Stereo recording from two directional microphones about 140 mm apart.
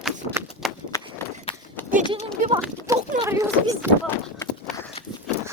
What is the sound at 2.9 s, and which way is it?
Speech, 20° right (ahead or behind).